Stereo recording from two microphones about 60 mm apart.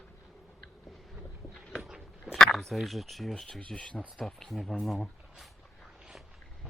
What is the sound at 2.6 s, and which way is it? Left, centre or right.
Speech, centre.